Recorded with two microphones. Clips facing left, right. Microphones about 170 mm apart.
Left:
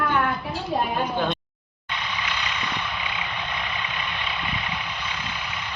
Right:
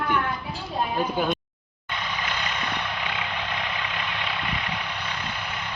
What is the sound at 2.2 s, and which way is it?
Vehicle, 50° right (ahead or behind).